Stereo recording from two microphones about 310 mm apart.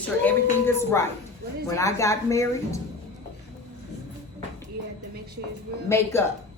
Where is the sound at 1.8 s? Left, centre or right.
Centre.